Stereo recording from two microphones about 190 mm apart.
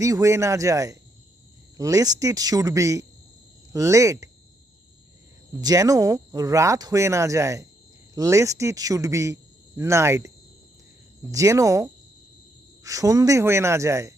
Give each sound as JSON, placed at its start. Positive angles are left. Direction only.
{"t": 0.0, "sound": "speech", "side_deg": -15}
{"t": 5.5, "sound": "speech", "side_deg": -20}